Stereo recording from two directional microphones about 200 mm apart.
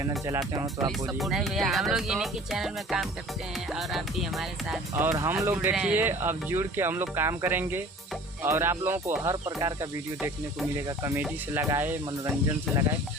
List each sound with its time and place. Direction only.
0.3 s speech: 15° right (ahead or behind)
0.9 s speech: centre (ahead or behind)
5.0 s speech: 15° right (ahead or behind)
10.2 s speech: 5° right (ahead or behind)
10.8 s speech: 15° right (ahead or behind)